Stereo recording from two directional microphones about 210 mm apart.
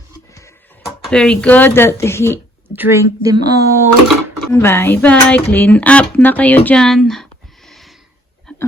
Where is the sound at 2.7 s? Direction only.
10° right (ahead or behind).